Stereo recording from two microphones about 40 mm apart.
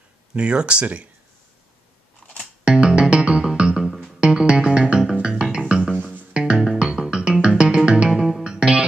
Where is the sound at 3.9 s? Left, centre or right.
Centre.